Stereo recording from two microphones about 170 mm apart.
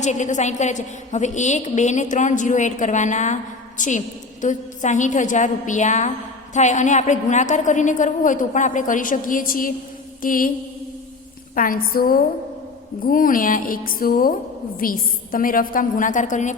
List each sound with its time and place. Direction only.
0.0 s a woman's voice: 45° left (ahead or behind)
11.5 s a woman's voice: 55° left (ahead or behind)